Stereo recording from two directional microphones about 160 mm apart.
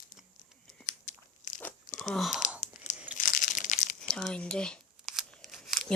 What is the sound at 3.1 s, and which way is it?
Crushing, 55° left (ahead or behind).